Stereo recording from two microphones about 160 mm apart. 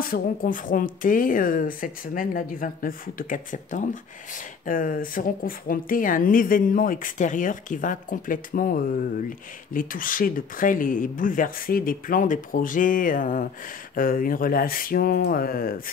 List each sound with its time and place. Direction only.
0.0 s speech: 60° left (ahead or behind)